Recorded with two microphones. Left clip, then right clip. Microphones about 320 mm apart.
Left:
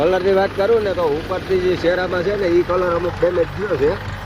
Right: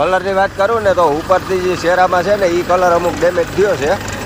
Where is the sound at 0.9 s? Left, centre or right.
Right.